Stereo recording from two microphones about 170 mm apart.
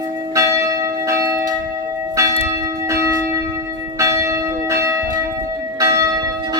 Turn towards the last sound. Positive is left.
turn(degrees=-20)  # may be behind; listen again after turning